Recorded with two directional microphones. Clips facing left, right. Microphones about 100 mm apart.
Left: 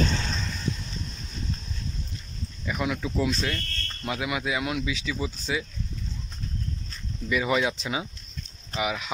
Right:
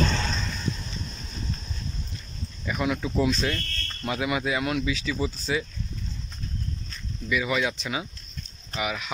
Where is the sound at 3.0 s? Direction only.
5° right (ahead or behind).